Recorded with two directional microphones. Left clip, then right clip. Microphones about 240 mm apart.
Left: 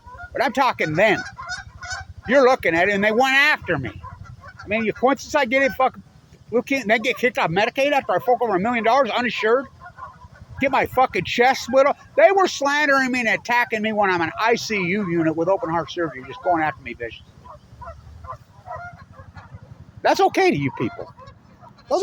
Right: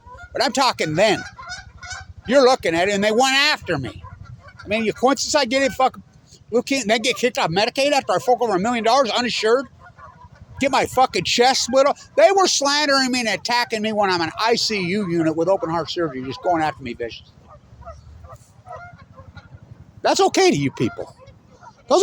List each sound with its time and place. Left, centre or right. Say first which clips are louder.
0.3 s speech: right 1 dB; centre
1.2 s goose: left 3 dB; centre
2.2 s speech: right 1 dB; centre
20.0 s speech: right 1 dB; centre
21.9 s speech: right 5 dB; right